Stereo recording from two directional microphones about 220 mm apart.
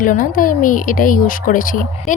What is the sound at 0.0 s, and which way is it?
Speech, 40° left (ahead or behind).